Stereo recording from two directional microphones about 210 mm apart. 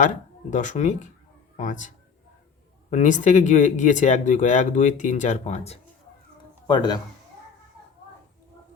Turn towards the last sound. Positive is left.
turn(degrees=20)  # may be behind; listen again after turning